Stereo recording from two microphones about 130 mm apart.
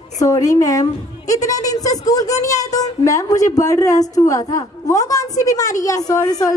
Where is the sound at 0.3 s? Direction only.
25° left (ahead or behind).